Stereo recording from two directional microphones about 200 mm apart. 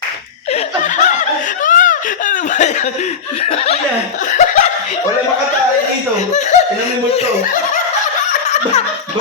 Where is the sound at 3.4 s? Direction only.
30° left (ahead or behind).